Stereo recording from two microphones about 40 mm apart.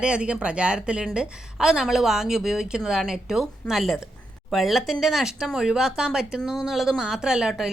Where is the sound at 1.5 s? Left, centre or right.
Centre.